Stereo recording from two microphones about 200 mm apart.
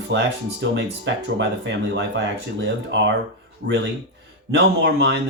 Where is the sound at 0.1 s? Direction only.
60° right (ahead or behind).